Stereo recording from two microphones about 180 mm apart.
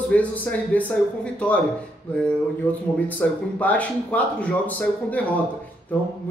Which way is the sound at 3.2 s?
5° left (ahead or behind).